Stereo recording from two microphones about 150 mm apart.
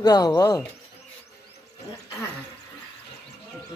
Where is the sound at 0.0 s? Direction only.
25° left (ahead or behind).